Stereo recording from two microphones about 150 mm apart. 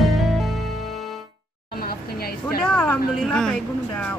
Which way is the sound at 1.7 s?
90° left.